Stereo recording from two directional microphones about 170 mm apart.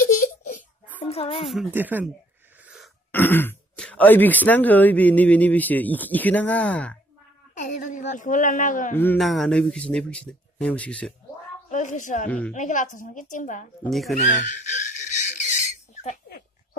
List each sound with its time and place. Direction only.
0.1 s a sound: 50° left (ahead or behind)
1.0 s a sound: 35° left (ahead or behind)
1.7 s speech: 10° right (ahead or behind)
2.6 s a sound: 5° right (ahead or behind)
3.1 s speech: 10° left (ahead or behind)
7.5 s a woman's voice: 50° left (ahead or behind)
8.9 s speech: 10° left (ahead or behind)
9.2 s speech: centre (ahead or behind)
11.7 s a woman's voice: 45° left (ahead or behind)
12.3 s speech: 5° left (ahead or behind)
12.5 s a woman's voice: 45° left (ahead or behind)
13.8 s speech: centre (ahead or behind)
14.1 s a sound: 45° left (ahead or behind)